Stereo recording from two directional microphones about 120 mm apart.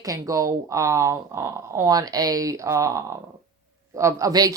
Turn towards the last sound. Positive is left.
turn(degrees=-30)  # may be behind; listen again after turning